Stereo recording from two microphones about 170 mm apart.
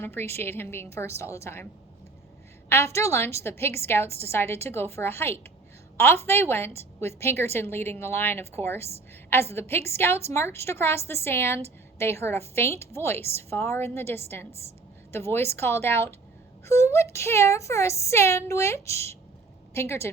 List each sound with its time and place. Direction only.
0.0 s a woman's voice: 15° left (ahead or behind)
2.6 s a woman's voice: 15° left (ahead or behind)